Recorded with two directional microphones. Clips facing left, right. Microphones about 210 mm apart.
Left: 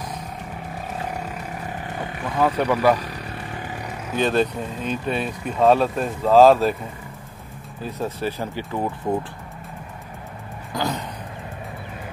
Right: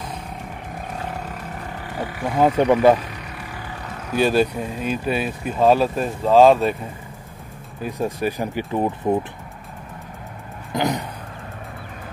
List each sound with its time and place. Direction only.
1.8 s roaring cats: 20° left (ahead or behind)
2.2 s speech: 25° right (ahead or behind)
3.1 s vehicle: 35° left (ahead or behind)
4.1 s speech: 10° right (ahead or behind)
7.8 s speech: 15° right (ahead or behind)
10.7 s a sound: 20° right (ahead or behind)